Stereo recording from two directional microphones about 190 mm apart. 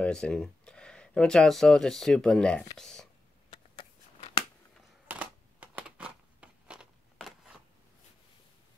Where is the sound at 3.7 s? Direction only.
30° left (ahead or behind).